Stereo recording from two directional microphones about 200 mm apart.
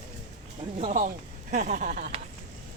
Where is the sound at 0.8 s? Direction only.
40° right (ahead or behind).